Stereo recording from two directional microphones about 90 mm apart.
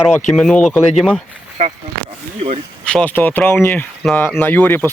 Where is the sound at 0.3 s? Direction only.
15° left (ahead or behind).